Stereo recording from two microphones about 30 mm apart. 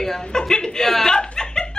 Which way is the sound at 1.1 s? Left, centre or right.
Left.